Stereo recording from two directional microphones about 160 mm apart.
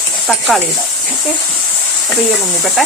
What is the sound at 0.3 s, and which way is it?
Speech, centre (ahead or behind).